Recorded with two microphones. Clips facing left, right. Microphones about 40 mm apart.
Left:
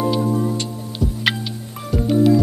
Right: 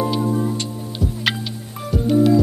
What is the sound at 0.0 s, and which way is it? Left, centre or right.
Music, centre.